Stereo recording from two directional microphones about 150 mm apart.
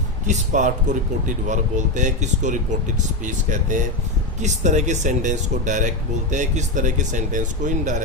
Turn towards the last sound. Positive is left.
turn(degrees=-55)  # may be behind; listen again after turning